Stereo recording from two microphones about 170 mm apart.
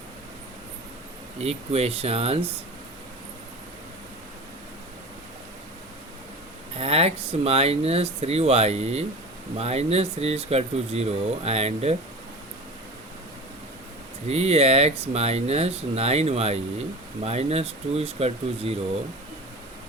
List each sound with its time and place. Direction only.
1.4 s speech: 35° right (ahead or behind)
6.7 s speech: 35° right (ahead or behind)
14.3 s speech: 40° right (ahead or behind)